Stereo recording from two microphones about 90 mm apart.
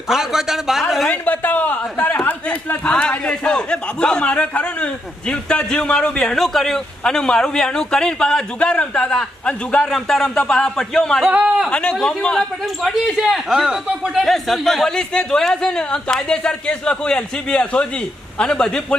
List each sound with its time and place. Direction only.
0.1 s a man's voice: 5° right (ahead or behind)
1.0 s a man's voice: 20° left (ahead or behind)
11.3 s a man's voice: 15° right (ahead or behind)
11.7 s a man's voice: 10° left (ahead or behind); by 14.3 s 10° right (ahead or behind)
14.3 s a man's voice: centre (ahead or behind)